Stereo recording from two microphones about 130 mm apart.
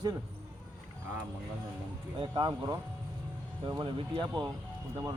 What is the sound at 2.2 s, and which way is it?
Speech, 40° right (ahead or behind).